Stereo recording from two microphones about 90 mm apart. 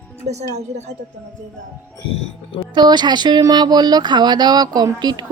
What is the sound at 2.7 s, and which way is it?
Speech, 55° right (ahead or behind).